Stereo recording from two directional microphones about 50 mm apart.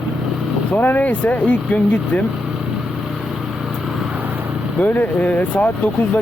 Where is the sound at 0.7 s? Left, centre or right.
Left.